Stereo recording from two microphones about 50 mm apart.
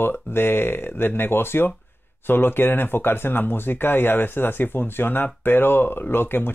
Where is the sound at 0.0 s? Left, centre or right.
Left.